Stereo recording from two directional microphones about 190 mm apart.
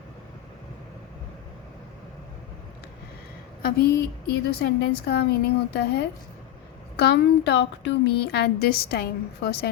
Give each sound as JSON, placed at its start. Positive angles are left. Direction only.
{"t": 3.6, "sound": "a woman's voice", "side_deg": 55}